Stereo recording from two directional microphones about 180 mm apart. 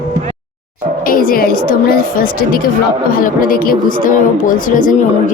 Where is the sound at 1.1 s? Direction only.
50° left (ahead or behind).